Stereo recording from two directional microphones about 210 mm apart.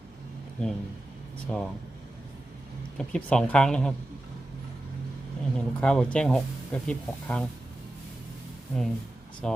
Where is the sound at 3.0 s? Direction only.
5° left (ahead or behind).